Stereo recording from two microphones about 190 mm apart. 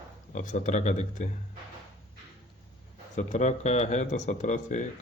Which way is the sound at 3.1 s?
40° left (ahead or behind).